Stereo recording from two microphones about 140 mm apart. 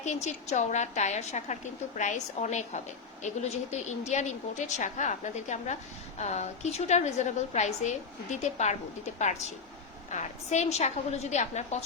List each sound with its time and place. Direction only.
0.0 s a woman's voice: 55° left (ahead or behind)